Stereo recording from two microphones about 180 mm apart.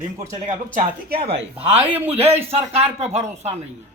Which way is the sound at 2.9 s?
35° right (ahead or behind).